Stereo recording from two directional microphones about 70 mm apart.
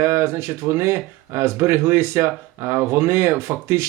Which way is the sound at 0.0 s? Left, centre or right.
Right.